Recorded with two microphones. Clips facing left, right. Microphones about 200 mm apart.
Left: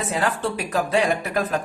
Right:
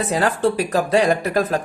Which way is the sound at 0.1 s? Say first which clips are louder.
Right 6 dB; 40° right (ahead or behind).